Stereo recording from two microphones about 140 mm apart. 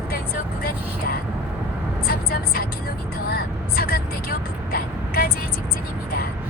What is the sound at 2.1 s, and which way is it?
Speech, 90° left.